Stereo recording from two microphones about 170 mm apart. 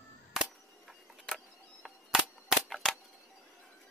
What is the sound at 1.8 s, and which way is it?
Cap gun, centre (ahead or behind).